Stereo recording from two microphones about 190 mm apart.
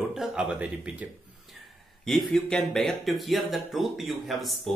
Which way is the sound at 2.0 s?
Centre (ahead or behind).